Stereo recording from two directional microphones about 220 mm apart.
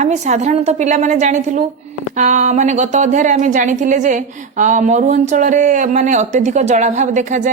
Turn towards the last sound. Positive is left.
turn(degrees=-35)  # may be behind; listen again after turning